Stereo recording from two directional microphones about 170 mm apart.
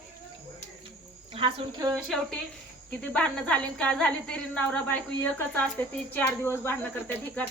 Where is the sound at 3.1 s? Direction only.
5° left (ahead or behind).